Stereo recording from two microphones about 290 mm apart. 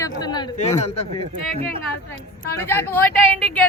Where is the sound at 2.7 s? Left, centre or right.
Centre.